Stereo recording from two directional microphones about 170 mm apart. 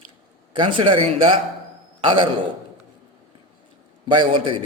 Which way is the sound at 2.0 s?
25° right (ahead or behind).